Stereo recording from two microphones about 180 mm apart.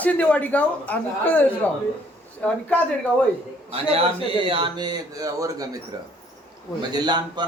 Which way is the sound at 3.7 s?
30° right (ahead or behind).